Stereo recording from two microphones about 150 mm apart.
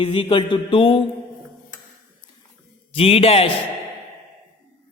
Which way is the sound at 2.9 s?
40° left (ahead or behind).